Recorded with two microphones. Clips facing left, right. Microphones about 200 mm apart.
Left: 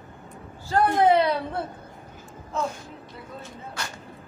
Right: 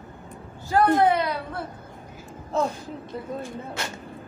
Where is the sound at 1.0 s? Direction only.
25° left (ahead or behind).